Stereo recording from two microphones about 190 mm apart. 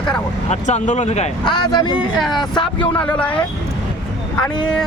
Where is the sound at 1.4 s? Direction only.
20° left (ahead or behind).